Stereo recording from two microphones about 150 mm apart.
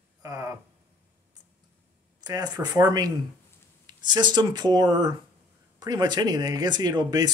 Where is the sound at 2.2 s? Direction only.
25° right (ahead or behind).